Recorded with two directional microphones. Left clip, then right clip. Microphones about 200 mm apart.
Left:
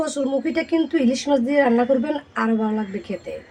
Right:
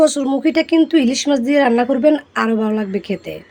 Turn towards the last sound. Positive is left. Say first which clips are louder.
# right 6 dB
turn(degrees=-45)  # may be behind; listen again after turning